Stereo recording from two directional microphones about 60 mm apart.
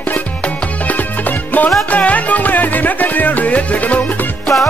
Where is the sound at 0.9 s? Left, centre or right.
Left.